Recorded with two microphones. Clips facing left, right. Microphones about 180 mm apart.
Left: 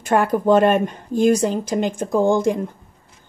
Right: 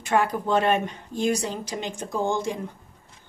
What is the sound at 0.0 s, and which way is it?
A woman's voice, 50° left (ahead or behind).